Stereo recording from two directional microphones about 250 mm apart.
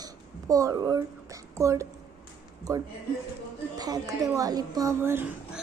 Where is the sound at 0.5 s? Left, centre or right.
Centre.